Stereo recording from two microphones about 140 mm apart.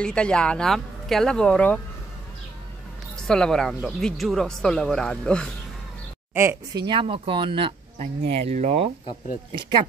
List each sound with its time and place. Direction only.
0.0 s speech: 5° left (ahead or behind)
3.3 s speech: 5° left (ahead or behind)
6.3 s speech: 20° right (ahead or behind)
6.9 s speech: 35° right (ahead or behind)
8.0 s speech: 45° right (ahead or behind)